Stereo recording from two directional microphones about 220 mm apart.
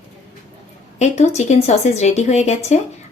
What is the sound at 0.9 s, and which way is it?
A woman's voice, 30° left (ahead or behind).